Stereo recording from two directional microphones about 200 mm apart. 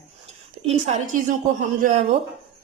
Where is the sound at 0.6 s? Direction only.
30° right (ahead or behind).